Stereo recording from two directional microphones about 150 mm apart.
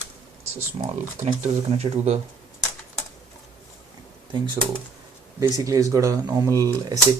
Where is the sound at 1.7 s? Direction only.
45° right (ahead or behind).